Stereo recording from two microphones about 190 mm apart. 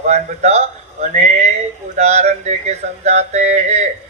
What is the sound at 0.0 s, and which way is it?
Speech, 35° right (ahead or behind).